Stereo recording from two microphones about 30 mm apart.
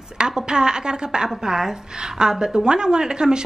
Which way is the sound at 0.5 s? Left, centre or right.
Right.